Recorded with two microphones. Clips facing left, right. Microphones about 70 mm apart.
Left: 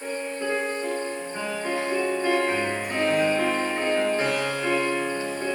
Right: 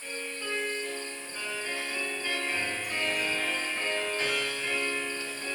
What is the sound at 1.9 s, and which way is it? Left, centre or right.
Music, left.